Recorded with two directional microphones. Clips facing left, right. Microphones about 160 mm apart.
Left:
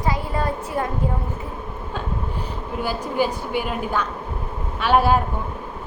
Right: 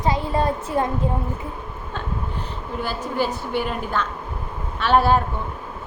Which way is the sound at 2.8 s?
10° left (ahead or behind).